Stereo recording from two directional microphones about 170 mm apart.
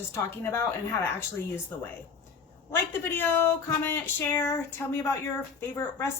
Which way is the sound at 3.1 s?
10° left (ahead or behind).